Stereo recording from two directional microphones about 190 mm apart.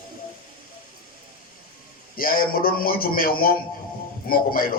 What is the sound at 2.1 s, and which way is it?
A man's voice, 50° left (ahead or behind).